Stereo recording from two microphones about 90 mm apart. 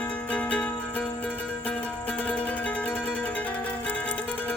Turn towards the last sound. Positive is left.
turn(degrees=15)  # may be behind; listen again after turning